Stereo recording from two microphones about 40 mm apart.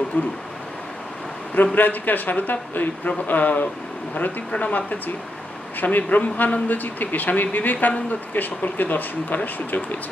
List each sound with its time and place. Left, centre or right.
0.2 s speech: left
1.8 s speech: left
4.5 s speech: left
4.7 s speech: left